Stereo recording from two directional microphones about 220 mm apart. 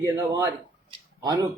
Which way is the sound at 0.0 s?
15° right (ahead or behind).